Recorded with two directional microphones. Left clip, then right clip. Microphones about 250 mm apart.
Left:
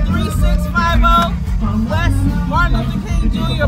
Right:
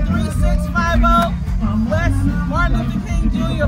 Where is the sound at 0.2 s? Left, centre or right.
Centre.